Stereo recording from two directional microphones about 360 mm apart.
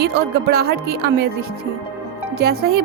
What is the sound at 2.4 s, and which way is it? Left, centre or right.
Speech, right.